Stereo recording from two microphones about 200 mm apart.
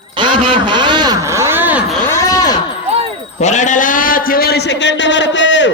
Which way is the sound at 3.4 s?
35° left (ahead or behind).